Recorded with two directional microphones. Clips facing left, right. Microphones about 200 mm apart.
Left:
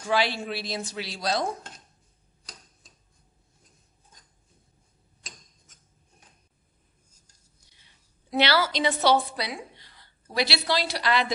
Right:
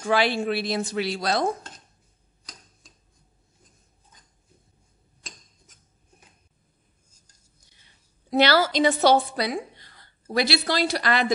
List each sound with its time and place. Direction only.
0.0 s speech: 55° right (ahead or behind)
5.2 s scissors: centre (ahead or behind)
8.3 s a woman's voice: 45° right (ahead or behind)